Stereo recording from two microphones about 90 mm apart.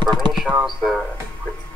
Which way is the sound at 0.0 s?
60° right (ahead or behind).